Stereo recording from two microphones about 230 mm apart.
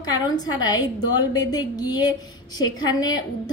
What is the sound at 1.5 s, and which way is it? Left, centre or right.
A woman's voice, centre.